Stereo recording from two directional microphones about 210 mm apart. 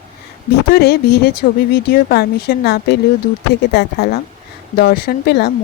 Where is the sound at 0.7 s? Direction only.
50° left (ahead or behind).